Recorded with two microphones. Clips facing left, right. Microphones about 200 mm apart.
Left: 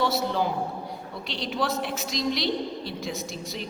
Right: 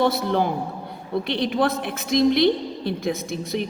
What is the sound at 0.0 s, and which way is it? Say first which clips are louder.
A woman's voice: right 5 dB; 55° right (ahead or behind).